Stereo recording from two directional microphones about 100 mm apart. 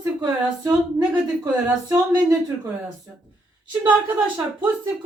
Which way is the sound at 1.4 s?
35° right (ahead or behind).